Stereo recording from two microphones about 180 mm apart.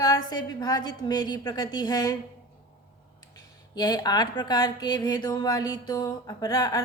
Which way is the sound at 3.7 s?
25° left (ahead or behind).